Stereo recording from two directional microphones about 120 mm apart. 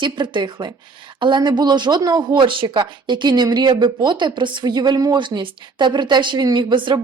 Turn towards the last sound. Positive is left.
turn(degrees=-40)  # may be behind; listen again after turning